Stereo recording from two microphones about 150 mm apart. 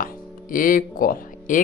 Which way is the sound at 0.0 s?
65° left (ahead or behind).